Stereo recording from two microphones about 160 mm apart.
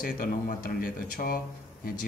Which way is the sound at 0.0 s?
65° left (ahead or behind).